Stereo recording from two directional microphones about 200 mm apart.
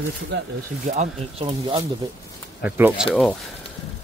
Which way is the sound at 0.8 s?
30° right (ahead or behind).